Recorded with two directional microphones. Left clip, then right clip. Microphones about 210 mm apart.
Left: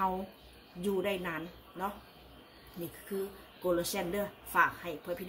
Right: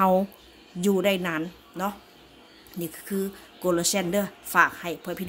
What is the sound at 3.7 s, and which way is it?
A woman's voice, 50° right (ahead or behind).